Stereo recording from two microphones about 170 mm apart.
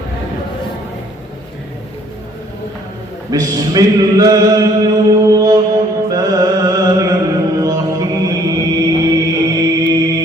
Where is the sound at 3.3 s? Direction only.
20° right (ahead or behind).